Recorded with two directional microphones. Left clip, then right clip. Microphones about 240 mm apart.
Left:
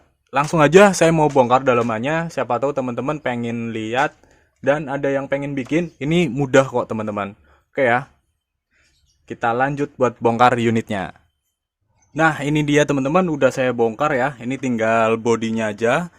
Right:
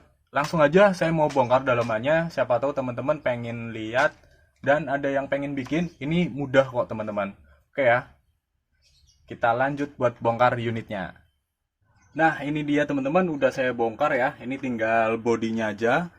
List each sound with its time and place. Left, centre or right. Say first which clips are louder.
0.3 s a man's voice: left 5 dB; left
9.2 s a man's voice: left 3 dB; left
12.1 s a man's voice: left 5 dB; left